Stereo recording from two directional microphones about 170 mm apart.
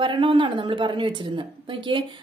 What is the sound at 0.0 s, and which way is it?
Speech, 30° right (ahead or behind).